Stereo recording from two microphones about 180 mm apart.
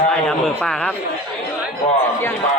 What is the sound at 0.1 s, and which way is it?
Speech, 5° left (ahead or behind).